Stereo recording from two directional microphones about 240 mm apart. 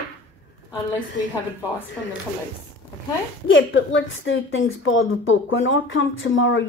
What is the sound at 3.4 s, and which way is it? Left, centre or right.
A woman's voice, left.